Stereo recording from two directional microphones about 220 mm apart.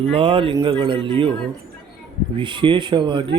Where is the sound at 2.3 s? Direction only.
20° right (ahead or behind).